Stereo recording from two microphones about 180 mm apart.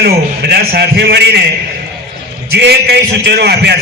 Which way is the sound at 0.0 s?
65° right (ahead or behind).